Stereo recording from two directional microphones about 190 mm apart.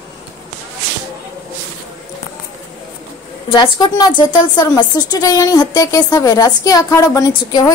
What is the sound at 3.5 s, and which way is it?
A woman's voice, 25° left (ahead or behind).